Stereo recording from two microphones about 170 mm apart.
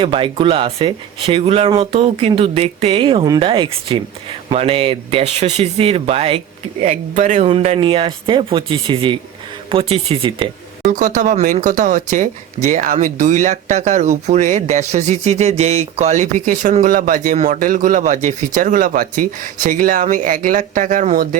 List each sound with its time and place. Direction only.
0.0 s speech: 30° right (ahead or behind)
10.9 s speech: 50° right (ahead or behind)